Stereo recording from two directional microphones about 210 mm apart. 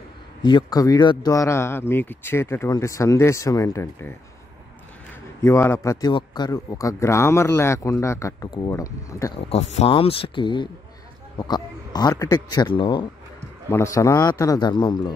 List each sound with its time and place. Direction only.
0.4 s speech: 20° left (ahead or behind)
5.4 s speech: 15° left (ahead or behind)
9.8 s speech: 25° left (ahead or behind)